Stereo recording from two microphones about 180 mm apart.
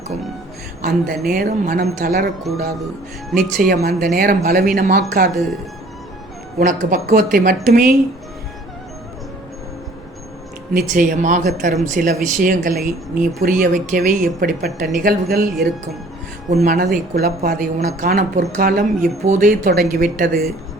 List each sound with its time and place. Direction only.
0.8 s speech: 55° right (ahead or behind)
3.3 s speech: 55° right (ahead or behind)
6.6 s speech: 55° right (ahead or behind)
10.8 s speech: 50° right (ahead or behind)
15.5 s speech: centre (ahead or behind)
16.5 s speech: 55° right (ahead or behind)